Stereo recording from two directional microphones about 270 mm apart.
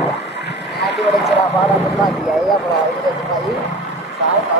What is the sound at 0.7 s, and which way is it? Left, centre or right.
Music, centre.